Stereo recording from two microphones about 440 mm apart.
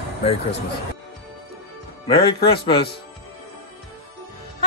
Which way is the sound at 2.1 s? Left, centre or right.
Centre.